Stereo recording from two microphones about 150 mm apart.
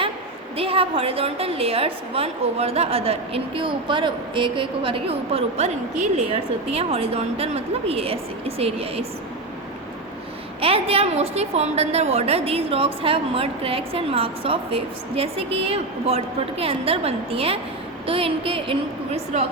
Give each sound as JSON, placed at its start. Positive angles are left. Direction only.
{"t": 0.5, "sound": "a woman's voice", "side_deg": -40}
{"t": 10.6, "sound": "a woman's voice", "side_deg": -40}